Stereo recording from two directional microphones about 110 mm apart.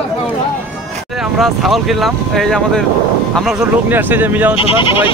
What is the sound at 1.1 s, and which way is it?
Speech, centre (ahead or behind).